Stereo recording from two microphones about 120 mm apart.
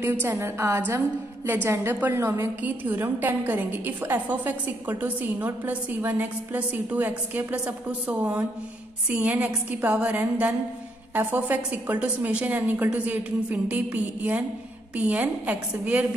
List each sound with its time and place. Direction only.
0.0 s a woman's voice: 20° right (ahead or behind)